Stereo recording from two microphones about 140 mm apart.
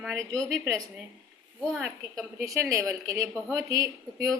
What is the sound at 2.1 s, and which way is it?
A woman's voice, 25° right (ahead or behind).